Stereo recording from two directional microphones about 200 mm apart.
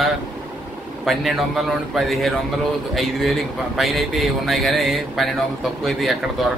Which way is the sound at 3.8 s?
Centre (ahead or behind).